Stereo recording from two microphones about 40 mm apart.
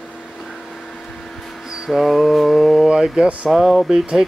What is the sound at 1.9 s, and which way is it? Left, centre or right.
Speech, centre.